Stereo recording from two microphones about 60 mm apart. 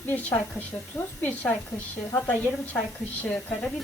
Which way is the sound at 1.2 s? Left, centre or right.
Left.